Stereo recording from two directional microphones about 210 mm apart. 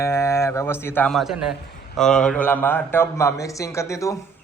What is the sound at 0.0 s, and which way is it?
A man's voice, 15° left (ahead or behind).